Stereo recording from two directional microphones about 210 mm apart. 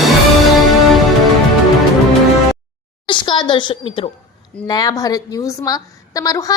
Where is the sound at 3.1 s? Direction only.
20° left (ahead or behind).